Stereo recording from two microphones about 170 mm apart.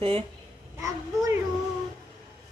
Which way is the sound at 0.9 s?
20° right (ahead or behind).